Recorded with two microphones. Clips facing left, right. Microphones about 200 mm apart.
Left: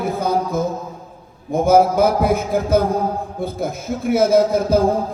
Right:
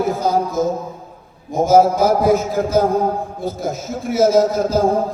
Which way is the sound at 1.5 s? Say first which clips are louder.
Right 1 dB; 60° left (ahead or behind).